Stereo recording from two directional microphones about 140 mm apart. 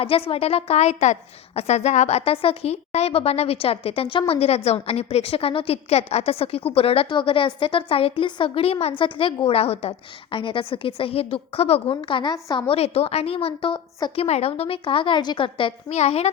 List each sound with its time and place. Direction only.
0.0 s a woman's voice: 40° left (ahead or behind)
12.6 s a woman's voice: 45° left (ahead or behind)
14.3 s a woman's voice: 50° left (ahead or behind)
15.9 s a woman's voice: 50° left (ahead or behind)